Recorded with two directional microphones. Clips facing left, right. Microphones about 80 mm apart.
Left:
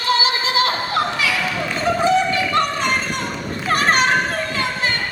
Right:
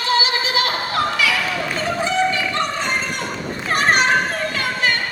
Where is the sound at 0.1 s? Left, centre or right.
Left.